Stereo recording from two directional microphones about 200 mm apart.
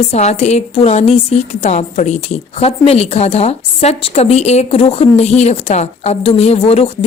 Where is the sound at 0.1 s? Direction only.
35° left (ahead or behind).